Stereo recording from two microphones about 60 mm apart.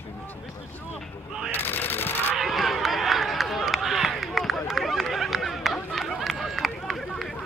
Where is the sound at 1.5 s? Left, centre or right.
Left.